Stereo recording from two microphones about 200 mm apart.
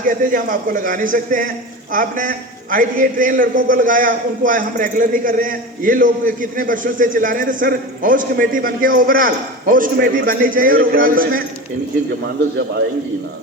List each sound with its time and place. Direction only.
0.0 s a man's voice: 40° right (ahead or behind)